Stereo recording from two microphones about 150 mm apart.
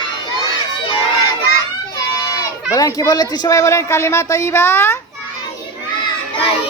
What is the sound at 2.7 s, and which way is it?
Speech, 25° left (ahead or behind).